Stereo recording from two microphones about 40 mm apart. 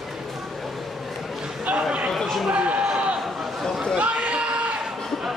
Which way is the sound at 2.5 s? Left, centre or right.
Right.